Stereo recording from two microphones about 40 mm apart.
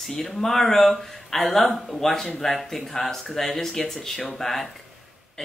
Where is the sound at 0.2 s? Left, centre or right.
Centre.